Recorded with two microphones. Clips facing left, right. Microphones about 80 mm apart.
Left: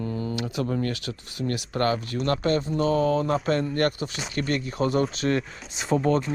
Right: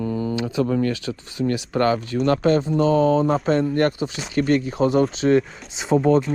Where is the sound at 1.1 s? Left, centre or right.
Right.